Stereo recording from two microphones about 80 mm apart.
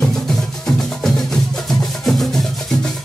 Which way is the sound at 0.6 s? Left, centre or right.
Centre.